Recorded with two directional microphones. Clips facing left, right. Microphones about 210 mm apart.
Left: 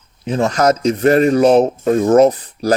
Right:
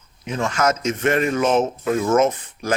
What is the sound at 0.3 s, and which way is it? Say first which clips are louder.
Speech: left 6 dB; 35° left (ahead or behind).